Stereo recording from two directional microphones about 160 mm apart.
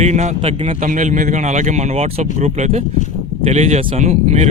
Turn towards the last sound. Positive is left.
turn(degrees=-45)  # may be behind; listen again after turning